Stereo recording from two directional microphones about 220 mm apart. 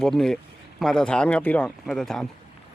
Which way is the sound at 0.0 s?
Centre (ahead or behind).